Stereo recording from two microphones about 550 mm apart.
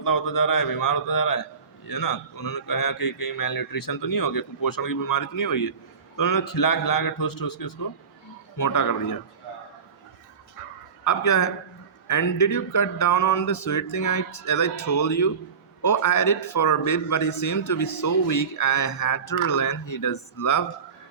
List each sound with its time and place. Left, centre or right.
0.0 s a man's voice: left
11.0 s a man's voice: left